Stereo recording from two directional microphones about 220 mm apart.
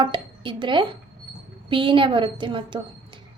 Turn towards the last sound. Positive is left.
turn(degrees=-20)  # may be behind; listen again after turning